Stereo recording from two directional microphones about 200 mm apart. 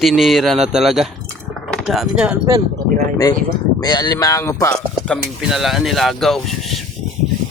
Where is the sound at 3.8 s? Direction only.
20° left (ahead or behind).